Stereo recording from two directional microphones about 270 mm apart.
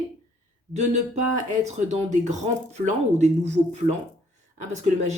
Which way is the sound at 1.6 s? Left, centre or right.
Right.